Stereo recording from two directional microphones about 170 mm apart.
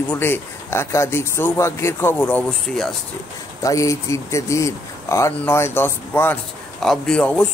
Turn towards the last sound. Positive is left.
turn(degrees=5)  # may be behind; listen again after turning